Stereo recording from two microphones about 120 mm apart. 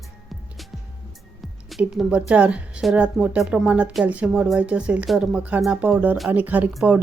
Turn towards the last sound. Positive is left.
turn(degrees=-15)  # may be behind; listen again after turning